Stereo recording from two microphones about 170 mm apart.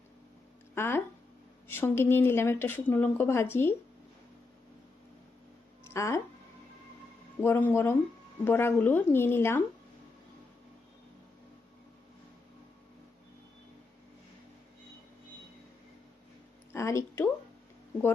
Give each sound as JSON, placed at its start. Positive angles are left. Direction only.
{"t": 0.8, "sound": "speech", "side_deg": 15}
{"t": 5.9, "sound": "speech", "side_deg": 15}
{"t": 7.4, "sound": "speech", "side_deg": 15}
{"t": 16.7, "sound": "speech", "side_deg": 15}